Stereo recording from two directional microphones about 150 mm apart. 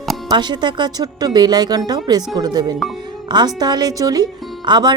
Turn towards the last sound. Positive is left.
turn(degrees=-30)  # may be behind; listen again after turning